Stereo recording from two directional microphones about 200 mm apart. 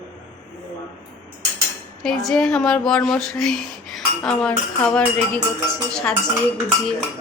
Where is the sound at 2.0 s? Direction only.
5° left (ahead or behind).